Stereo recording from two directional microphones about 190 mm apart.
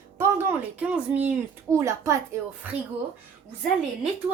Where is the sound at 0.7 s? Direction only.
5° right (ahead or behind).